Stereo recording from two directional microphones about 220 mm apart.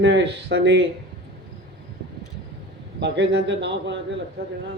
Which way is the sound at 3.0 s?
55° right (ahead or behind).